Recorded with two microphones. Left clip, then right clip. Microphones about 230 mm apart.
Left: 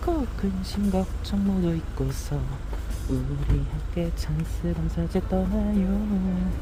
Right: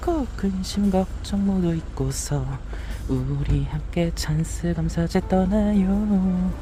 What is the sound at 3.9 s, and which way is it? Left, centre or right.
Speech, right.